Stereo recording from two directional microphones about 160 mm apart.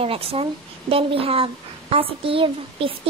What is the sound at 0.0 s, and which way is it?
A woman's voice, 35° right (ahead or behind).